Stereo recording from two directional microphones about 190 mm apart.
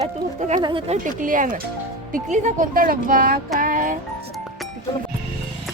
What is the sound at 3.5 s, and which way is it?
Music, 45° right (ahead or behind).